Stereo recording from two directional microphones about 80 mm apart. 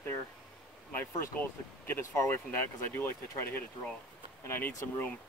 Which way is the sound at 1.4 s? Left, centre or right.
Left.